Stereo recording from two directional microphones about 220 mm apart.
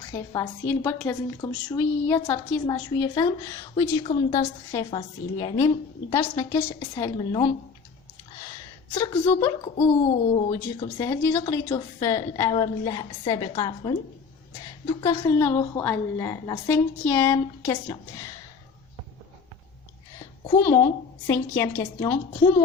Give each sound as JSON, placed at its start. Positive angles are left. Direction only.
{"t": 0.1, "sound": "a woman's voice", "side_deg": 10}
{"t": 9.0, "sound": "a woman's voice", "side_deg": 15}
{"t": 15.0, "sound": "a woman's voice", "side_deg": 10}
{"t": 20.5, "sound": "a woman's voice", "side_deg": 10}